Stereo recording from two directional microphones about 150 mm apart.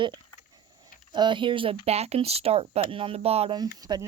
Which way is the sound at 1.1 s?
30° right (ahead or behind).